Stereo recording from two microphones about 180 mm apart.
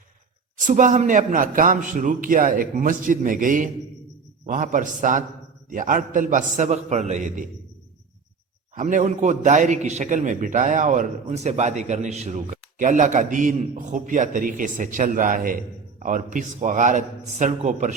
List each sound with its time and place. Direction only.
0.5 s a man's voice: 45° right (ahead or behind)
8.7 s a man's voice: 45° right (ahead or behind)